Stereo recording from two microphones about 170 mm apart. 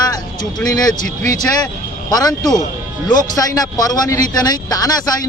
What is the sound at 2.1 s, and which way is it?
Speech, 20° left (ahead or behind).